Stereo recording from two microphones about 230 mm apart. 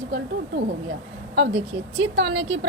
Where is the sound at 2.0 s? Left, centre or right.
Right.